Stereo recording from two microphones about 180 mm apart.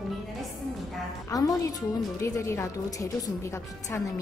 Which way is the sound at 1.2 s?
20° left (ahead or behind).